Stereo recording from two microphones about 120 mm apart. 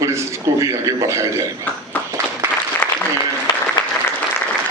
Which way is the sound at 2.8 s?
15° left (ahead or behind).